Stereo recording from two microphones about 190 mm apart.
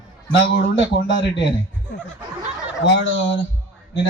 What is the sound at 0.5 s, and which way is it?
Speech, 70° left (ahead or behind).